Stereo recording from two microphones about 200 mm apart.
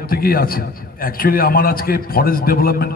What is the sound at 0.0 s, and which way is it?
A man's voice, 45° left (ahead or behind).